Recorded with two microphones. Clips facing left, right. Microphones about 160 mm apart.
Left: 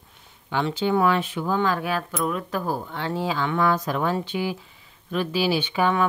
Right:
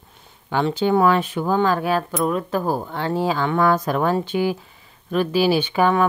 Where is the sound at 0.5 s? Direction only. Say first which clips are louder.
Right 4 dB; 45° right (ahead or behind).